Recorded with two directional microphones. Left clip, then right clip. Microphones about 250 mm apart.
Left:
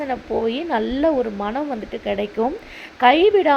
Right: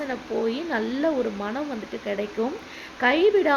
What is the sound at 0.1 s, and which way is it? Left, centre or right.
Speech, centre.